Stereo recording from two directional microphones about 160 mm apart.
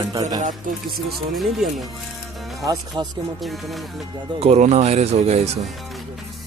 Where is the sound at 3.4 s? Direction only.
Centre (ahead or behind).